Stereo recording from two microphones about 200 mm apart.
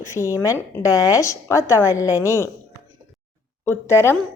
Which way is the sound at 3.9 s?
10° left (ahead or behind).